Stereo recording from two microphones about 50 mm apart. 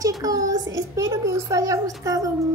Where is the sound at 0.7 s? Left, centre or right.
Right.